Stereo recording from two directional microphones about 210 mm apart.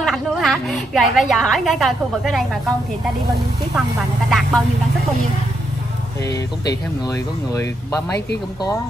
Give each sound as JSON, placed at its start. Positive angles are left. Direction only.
{"t": 0.0, "sound": "a sound", "side_deg": 0}
{"t": 1.3, "sound": "a woman's voice", "side_deg": 0}
{"t": 4.3, "sound": "a woman's voice", "side_deg": 0}
{"t": 6.2, "sound": "speech", "side_deg": 50}
{"t": 7.1, "sound": "speech", "side_deg": 15}